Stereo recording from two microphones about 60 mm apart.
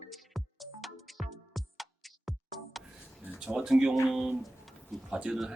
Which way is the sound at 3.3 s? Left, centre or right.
Centre.